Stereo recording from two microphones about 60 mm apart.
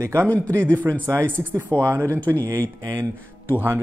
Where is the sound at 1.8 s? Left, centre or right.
Right.